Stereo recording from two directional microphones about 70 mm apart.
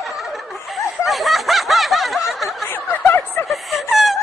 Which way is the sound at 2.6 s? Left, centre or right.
Left.